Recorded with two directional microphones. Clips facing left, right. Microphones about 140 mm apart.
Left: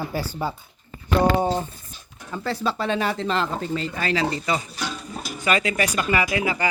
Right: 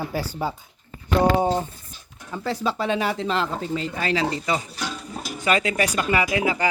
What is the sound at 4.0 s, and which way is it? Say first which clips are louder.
Speech: even; 20° right (ahead or behind).